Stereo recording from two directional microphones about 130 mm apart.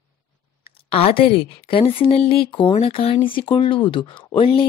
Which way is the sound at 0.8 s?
45° left (ahead or behind).